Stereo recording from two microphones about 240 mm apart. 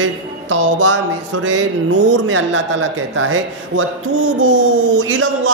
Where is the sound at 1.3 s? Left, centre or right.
Right.